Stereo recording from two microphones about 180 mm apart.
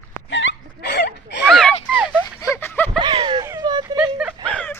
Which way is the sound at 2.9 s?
25° right (ahead or behind).